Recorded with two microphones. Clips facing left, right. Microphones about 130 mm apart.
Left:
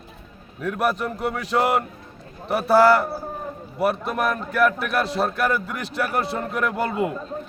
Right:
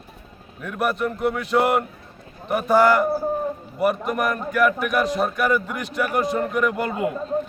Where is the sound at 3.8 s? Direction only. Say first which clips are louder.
Right 1 dB; 10° right (ahead or behind).